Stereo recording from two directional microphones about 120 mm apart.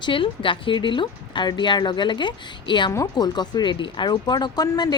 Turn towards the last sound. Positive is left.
turn(degrees=35)  # may be behind; listen again after turning